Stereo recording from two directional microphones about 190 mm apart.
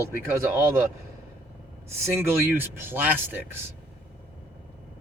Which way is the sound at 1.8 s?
15° right (ahead or behind).